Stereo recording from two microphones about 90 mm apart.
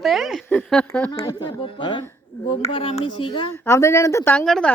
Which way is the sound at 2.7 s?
90° left.